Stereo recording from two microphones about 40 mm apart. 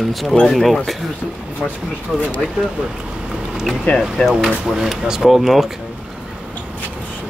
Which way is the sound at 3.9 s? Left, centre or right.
Left.